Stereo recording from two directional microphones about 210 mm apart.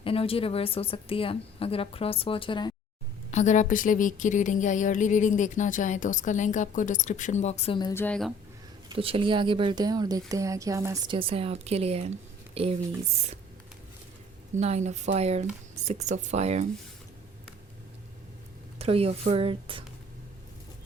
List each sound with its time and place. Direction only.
0.0 s a woman's voice: 25° left (ahead or behind)
3.3 s speech: 35° left (ahead or behind); by 8.0 s 20° left (ahead or behind)
8.0 s speech: 5° left (ahead or behind)
8.9 s speech: 25° right (ahead or behind)
14.5 s speech: 30° right (ahead or behind)
18.8 s speech: 30° right (ahead or behind)